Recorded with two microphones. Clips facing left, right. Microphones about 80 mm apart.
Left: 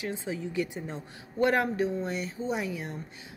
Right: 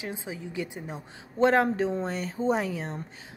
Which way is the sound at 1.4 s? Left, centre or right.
Right.